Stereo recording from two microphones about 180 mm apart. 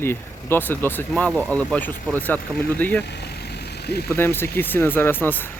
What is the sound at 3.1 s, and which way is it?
Vehicle, 65° left (ahead or behind).